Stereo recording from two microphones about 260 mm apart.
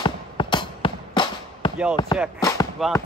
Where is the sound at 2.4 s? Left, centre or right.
Centre.